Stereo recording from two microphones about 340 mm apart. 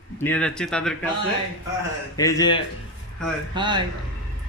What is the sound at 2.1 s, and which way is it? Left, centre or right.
Speech, centre.